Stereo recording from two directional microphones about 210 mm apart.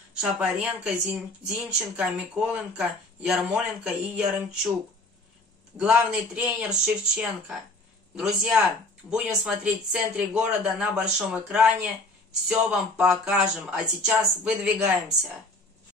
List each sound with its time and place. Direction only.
0.2 s speech: 5° right (ahead or behind)
5.8 s speech: 5° right (ahead or behind)